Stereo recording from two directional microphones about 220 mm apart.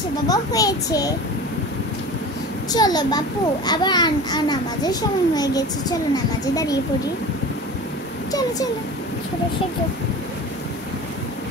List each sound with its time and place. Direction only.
0.3 s a child's voice: 15° left (ahead or behind)
2.7 s a child's voice: 15° left (ahead or behind)
8.3 s a sound: 15° left (ahead or behind)